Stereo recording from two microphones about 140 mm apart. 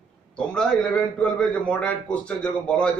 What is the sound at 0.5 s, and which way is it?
A man's voice, 5° left (ahead or behind).